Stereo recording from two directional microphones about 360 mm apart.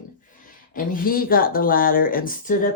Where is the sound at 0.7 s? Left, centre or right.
Left.